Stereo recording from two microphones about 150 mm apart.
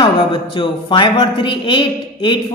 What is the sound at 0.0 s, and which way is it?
A man's voice, 35° left (ahead or behind).